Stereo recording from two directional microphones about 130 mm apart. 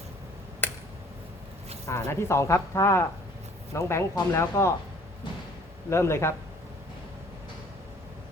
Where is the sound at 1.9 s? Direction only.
20° left (ahead or behind).